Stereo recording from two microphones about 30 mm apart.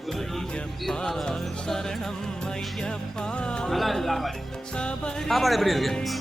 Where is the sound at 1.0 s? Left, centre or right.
Centre.